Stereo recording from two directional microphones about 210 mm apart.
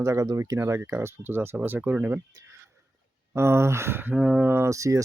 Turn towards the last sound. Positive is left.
turn(degrees=-15)  # may be behind; listen again after turning